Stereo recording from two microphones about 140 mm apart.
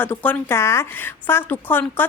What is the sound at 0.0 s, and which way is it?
A woman's voice, 15° left (ahead or behind).